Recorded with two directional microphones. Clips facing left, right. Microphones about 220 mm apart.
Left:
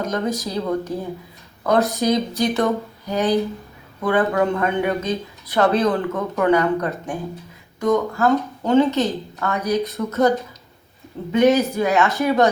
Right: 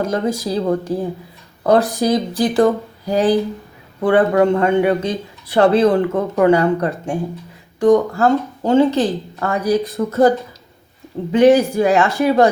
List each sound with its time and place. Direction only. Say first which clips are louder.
0.0 s a man's voice: right 4 dB; 30° right (ahead or behind)